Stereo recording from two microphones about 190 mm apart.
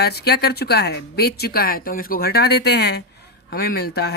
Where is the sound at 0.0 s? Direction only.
55° left (ahead or behind).